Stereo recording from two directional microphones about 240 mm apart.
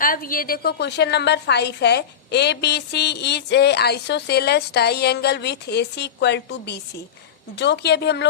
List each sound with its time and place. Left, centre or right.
0.0 s a woman's voice: left